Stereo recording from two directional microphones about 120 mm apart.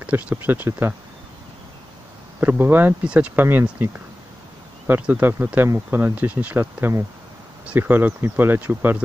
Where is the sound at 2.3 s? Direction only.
15° right (ahead or behind).